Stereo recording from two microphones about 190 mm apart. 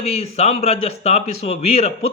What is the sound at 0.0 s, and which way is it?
A man's voice, 35° left (ahead or behind).